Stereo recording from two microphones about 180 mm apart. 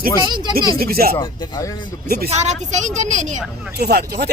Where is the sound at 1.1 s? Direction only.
20° left (ahead or behind).